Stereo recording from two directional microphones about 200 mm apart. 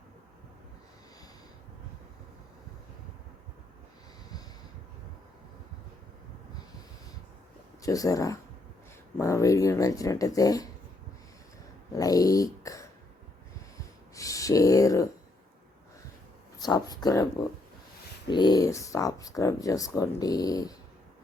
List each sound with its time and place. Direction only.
7.8 s speech: 15° left (ahead or behind)
11.9 s speech: 15° left (ahead or behind)
14.2 s a sound: 15° left (ahead or behind)
16.6 s speech: 20° left (ahead or behind)
18.3 s speech: 20° left (ahead or behind)